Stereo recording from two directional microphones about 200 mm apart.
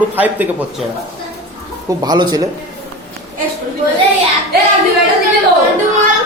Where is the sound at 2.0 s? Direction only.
20° right (ahead or behind).